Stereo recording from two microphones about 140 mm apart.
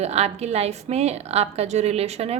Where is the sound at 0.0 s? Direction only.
50° right (ahead or behind).